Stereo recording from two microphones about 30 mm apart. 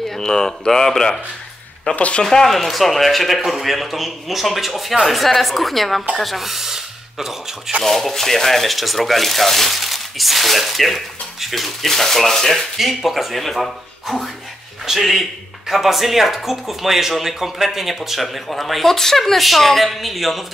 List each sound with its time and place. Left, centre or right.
0.1 s speech: centre
2.0 s speech: left
2.4 s speech: centre
7.8 s speech: centre
12.7 s speech: centre